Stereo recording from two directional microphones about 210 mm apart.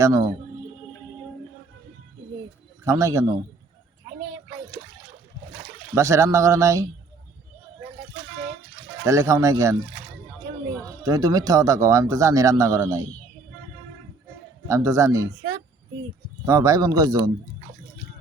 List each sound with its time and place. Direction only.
0.0 s speech: 15° right (ahead or behind)
2.8 s speech: 15° right (ahead or behind)
5.9 s speech: 15° right (ahead or behind)
9.0 s speech: 15° right (ahead or behind)
11.0 s speech: 15° right (ahead or behind)
14.7 s speech: 15° right (ahead or behind)
16.5 s speech: 15° right (ahead or behind)